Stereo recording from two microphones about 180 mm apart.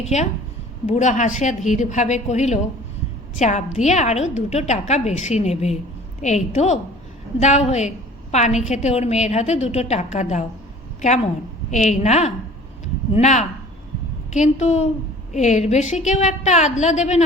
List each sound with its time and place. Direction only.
0.1 s a woman's voice: 40° left (ahead or behind)